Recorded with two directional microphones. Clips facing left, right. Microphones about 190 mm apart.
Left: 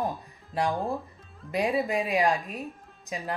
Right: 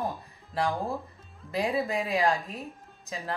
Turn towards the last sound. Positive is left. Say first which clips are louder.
# left 2 dB
turn(degrees=15)  # may be behind; listen again after turning